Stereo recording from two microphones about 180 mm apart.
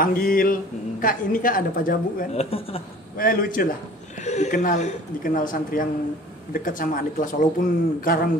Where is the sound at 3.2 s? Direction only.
50° left (ahead or behind).